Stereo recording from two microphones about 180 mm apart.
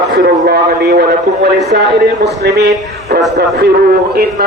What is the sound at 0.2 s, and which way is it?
A man's voice, 60° right (ahead or behind).